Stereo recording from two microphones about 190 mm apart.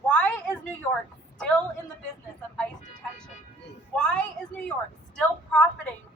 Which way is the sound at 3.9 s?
5° left (ahead or behind).